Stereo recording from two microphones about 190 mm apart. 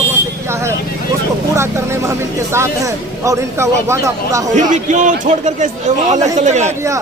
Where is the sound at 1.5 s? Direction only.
15° right (ahead or behind).